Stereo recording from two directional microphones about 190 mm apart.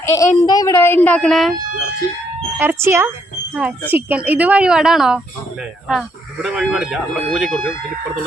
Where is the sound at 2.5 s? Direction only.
10° right (ahead or behind).